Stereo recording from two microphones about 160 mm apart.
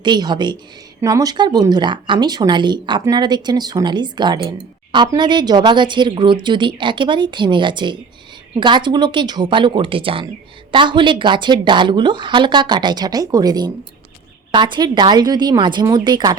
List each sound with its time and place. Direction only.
0.0 s speech: 25° right (ahead or behind)